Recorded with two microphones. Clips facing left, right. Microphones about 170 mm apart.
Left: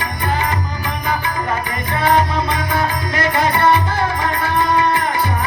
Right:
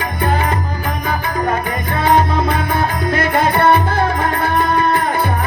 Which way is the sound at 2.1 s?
55° right (ahead or behind).